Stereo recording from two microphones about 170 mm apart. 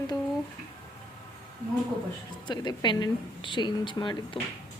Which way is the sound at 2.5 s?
25° left (ahead or behind).